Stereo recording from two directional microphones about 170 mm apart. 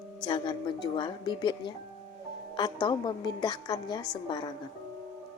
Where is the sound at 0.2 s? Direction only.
25° left (ahead or behind).